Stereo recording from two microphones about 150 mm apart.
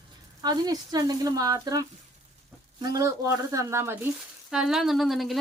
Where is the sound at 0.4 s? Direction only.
25° right (ahead or behind).